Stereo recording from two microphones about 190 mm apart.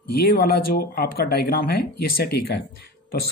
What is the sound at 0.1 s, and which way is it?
Speech, 55° left (ahead or behind).